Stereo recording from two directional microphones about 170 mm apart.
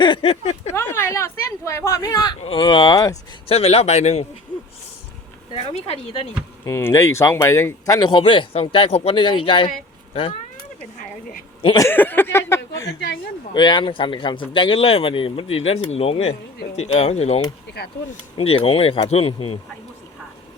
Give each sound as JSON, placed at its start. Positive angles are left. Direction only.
{"t": 0.0, "sound": "a sound", "side_deg": 30}
{"t": 0.7, "sound": "a sound", "side_deg": 15}
{"t": 2.4, "sound": "speech", "side_deg": 30}
{"t": 3.5, "sound": "speech", "side_deg": 35}
{"t": 5.5, "sound": "speech", "side_deg": 35}
{"t": 6.7, "sound": "speech", "side_deg": 15}
{"t": 11.6, "sound": "speech", "side_deg": 25}
{"t": 11.9, "sound": "speech", "side_deg": 10}
{"t": 13.5, "sound": "speech", "side_deg": 25}